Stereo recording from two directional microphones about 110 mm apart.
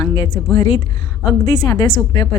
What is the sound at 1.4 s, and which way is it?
Speech, 40° left (ahead or behind).